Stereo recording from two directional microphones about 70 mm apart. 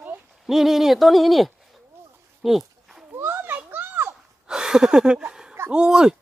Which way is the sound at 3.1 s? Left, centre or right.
Right.